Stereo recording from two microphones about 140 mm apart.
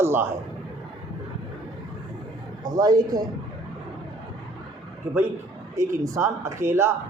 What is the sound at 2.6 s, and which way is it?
Speech, 30° right (ahead or behind).